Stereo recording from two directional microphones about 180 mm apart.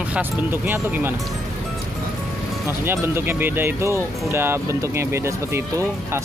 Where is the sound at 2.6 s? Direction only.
15° right (ahead or behind).